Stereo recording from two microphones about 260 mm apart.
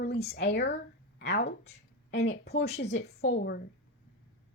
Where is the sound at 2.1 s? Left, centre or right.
Left.